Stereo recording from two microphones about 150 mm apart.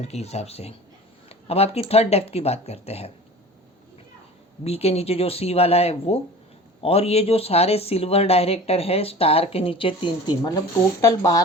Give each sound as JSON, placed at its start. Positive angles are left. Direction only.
{"t": 0.0, "sound": "speech", "side_deg": 45}
{"t": 4.6, "sound": "speech", "side_deg": 45}